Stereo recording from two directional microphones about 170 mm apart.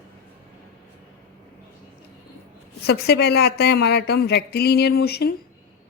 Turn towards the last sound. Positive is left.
turn(degrees=70)  # may be behind; listen again after turning